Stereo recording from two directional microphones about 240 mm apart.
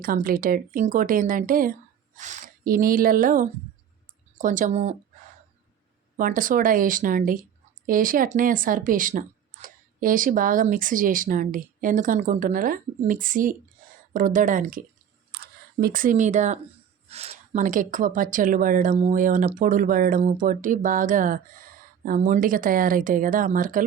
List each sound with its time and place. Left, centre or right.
0.0 s speech: right
6.1 s speech: right